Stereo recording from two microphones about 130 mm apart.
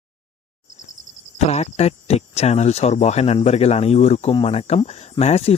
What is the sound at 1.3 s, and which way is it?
Speech, 55° left (ahead or behind).